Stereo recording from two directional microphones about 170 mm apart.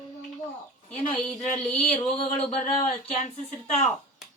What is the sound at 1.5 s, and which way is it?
Speech, 10° left (ahead or behind).